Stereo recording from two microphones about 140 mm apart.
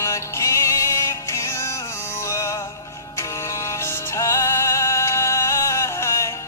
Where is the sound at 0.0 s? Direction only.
20° left (ahead or behind).